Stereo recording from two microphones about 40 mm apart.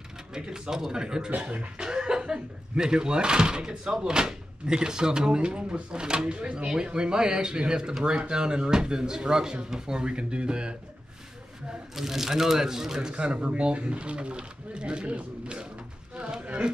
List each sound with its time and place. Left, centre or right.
0.3 s speech: centre
1.3 s scratching: right
1.8 s speech: centre
11.9 s speech: centre
13.1 s speech: right
16.2 s a sound: right